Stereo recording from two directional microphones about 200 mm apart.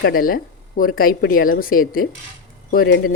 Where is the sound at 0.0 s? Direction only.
45° left (ahead or behind).